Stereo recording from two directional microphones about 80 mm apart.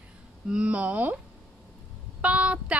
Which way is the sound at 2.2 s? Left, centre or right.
Centre.